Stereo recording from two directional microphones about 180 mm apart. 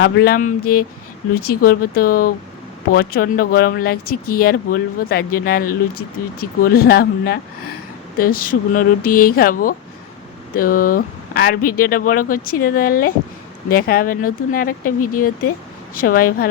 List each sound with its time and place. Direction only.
0.0 s speech: 60° left (ahead or behind)